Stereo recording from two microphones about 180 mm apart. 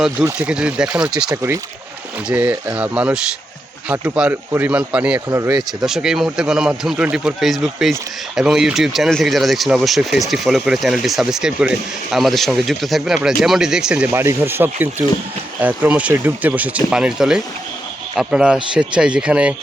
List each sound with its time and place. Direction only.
0.3 s speech: 10° right (ahead or behind)
5.4 s speech: 20° right (ahead or behind)
5.8 s speech: 5° right (ahead or behind)